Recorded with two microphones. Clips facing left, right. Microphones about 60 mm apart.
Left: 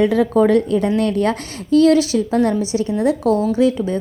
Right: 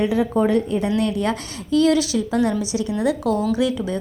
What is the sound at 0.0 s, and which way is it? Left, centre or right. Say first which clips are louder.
Speech: left 5 dB; left.